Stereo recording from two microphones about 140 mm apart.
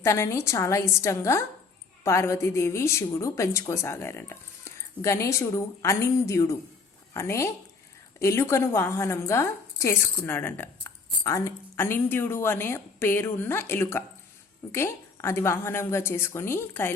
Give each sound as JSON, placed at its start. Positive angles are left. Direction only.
{"t": 0.0, "sound": "a woman's voice", "side_deg": 20}